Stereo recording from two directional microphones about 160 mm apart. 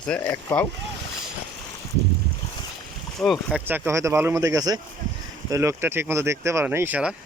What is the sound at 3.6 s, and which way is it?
Speech, 10° right (ahead or behind).